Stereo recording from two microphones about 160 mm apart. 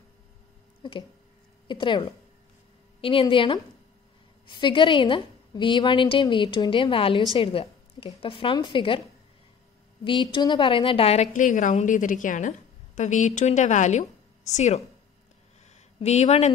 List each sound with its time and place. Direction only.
0.8 s a woman's voice: 30° left (ahead or behind)
10.0 s a woman's voice: 30° left (ahead or behind); by 14.8 s 45° left (ahead or behind)
16.0 s a woman's voice: 45° left (ahead or behind)